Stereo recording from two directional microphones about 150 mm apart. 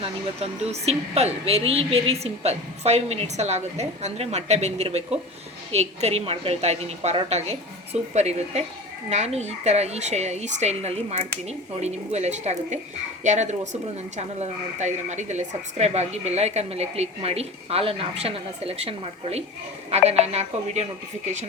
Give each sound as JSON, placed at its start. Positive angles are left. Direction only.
{"t": 0.0, "sound": "speech", "side_deg": -45}